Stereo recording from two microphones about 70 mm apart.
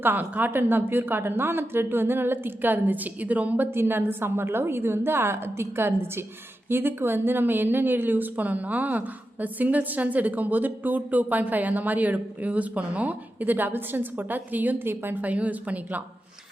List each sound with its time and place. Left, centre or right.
0.0 s a woman's voice: right
3.7 s a woman's voice: right